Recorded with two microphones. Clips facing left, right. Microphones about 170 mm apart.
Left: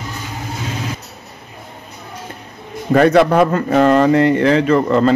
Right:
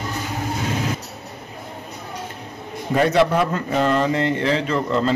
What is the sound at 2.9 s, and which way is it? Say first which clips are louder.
Speech: left 6 dB; 60° left (ahead or behind).